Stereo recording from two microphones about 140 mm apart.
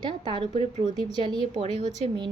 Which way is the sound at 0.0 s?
35° right (ahead or behind).